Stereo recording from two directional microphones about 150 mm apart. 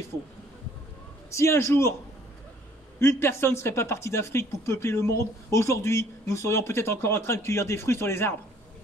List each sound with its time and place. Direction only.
1.3 s speech: 20° left (ahead or behind)
3.0 s speech: 15° left (ahead or behind)